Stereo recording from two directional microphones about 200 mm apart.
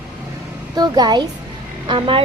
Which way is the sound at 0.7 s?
20° right (ahead or behind).